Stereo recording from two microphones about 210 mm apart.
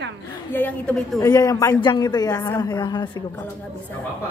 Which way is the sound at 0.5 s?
5° left (ahead or behind).